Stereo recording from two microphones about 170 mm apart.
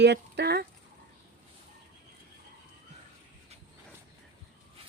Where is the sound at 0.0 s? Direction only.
80° right.